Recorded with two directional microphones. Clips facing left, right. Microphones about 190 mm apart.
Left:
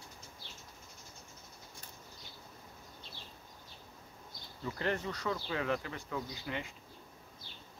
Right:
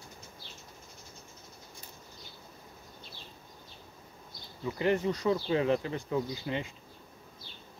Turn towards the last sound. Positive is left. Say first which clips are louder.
# right 6 dB
turn(degrees=-25)  # may be behind; listen again after turning